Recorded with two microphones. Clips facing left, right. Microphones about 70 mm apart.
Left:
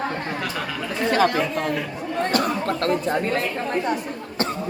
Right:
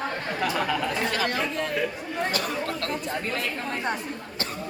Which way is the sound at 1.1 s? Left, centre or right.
Left.